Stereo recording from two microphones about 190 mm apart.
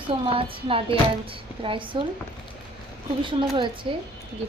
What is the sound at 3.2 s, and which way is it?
Speech, 25° right (ahead or behind).